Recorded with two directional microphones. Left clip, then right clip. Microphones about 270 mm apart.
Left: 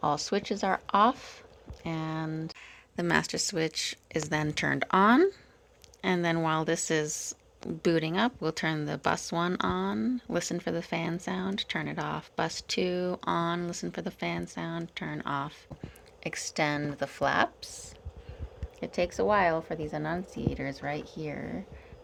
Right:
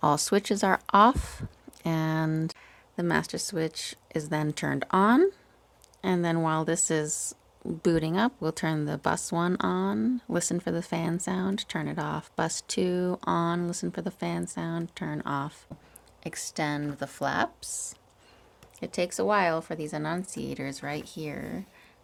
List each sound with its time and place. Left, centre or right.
0.0 s speech: right
2.6 s speech: centre